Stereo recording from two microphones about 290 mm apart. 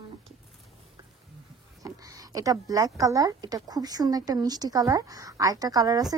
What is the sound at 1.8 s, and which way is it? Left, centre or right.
Speech, centre.